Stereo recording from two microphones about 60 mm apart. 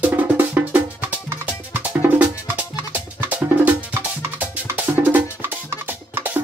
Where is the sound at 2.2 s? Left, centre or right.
Right.